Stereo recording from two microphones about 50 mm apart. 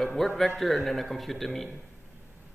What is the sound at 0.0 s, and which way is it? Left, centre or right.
A man's voice, centre.